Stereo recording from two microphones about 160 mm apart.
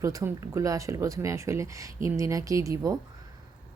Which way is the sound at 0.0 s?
20° right (ahead or behind).